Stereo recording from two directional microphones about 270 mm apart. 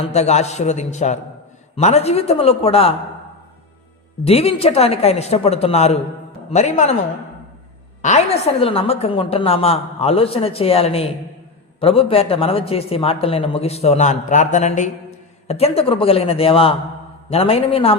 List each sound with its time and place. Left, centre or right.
0.1 s a man's voice: left
4.2 s a man's voice: left
8.0 s a man's voice: left